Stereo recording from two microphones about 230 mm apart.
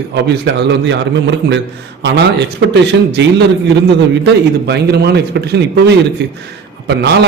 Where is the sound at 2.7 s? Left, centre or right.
Right.